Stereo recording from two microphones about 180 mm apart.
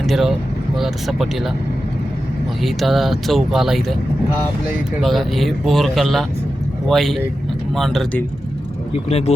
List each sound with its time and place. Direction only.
0.0 s speech: centre (ahead or behind)
2.6 s speech: centre (ahead or behind)
4.9 s speech: centre (ahead or behind)
9.0 s speech: 35° left (ahead or behind)